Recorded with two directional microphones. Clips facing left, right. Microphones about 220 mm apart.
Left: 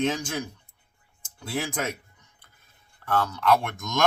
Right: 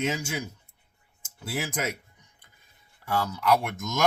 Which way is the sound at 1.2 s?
5° right (ahead or behind).